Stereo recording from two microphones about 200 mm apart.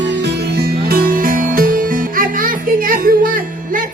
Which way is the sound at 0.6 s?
45° right (ahead or behind).